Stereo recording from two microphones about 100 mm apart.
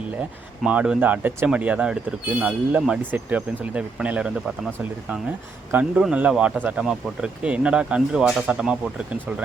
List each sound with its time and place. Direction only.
0.6 s speech: 10° right (ahead or behind)